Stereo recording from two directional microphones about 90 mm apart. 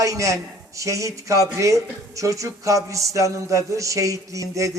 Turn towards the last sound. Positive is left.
turn(degrees=-35)  # may be behind; listen again after turning